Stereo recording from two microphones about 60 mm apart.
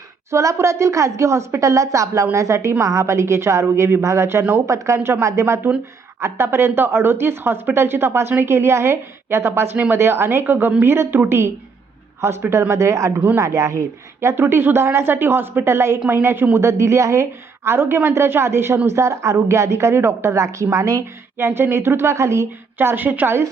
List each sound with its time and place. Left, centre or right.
0.3 s a woman's voice: right
16.6 s a woman's voice: right
21.3 s speech: right
22.8 s a woman's voice: right